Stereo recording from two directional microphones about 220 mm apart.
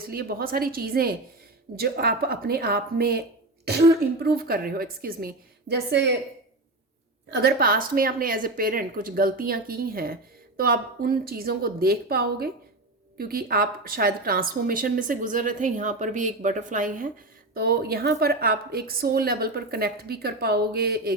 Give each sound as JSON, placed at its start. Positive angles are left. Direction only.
{"t": 0.0, "sound": "a woman's voice", "side_deg": -45}
{"t": 7.3, "sound": "a woman's voice", "side_deg": -50}